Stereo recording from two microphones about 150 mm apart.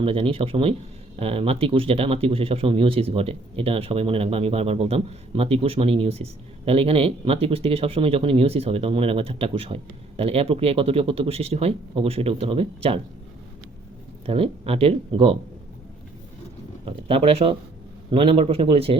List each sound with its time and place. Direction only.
0.0 s speech: 40° right (ahead or behind)
14.3 s speech: 40° right (ahead or behind)
16.8 s speech: 40° right (ahead or behind)